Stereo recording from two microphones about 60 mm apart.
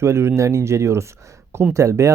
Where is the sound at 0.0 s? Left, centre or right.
Right.